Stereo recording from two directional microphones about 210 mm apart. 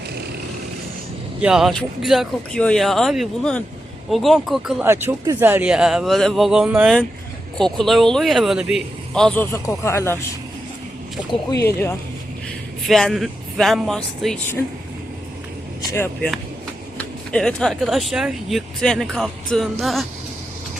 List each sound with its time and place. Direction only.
1.4 s speech: 5° right (ahead or behind); by 10.2 s 10° left (ahead or behind)
11.3 s speech: 15° left (ahead or behind)
12.9 s speech: centre (ahead or behind)
15.8 s vehicle: 15° left (ahead or behind)
17.0 s speech: 5° left (ahead or behind)